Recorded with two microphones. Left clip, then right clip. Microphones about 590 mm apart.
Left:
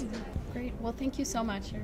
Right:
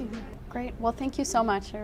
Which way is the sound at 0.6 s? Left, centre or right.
Right.